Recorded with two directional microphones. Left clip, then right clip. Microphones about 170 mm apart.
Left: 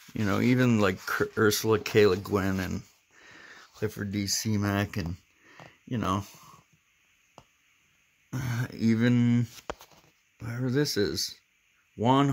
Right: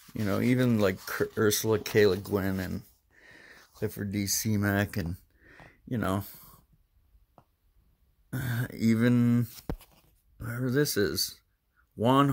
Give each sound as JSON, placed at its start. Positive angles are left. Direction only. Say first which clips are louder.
{"t": 0.1, "sound": "speech", "louder": "left 2 dB", "side_deg": 5}
{"t": 8.3, "sound": "speech", "louder": "even", "side_deg": -15}
{"t": 9.8, "sound": "a sound", "louder": "left 6 dB", "side_deg": 5}
{"t": 10.4, "sound": "speech", "louder": "even", "side_deg": -15}